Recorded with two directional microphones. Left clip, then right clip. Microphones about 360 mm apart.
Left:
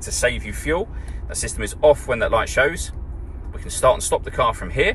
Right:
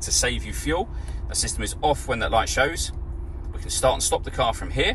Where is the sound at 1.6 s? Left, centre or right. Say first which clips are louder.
Left 9 dB; centre.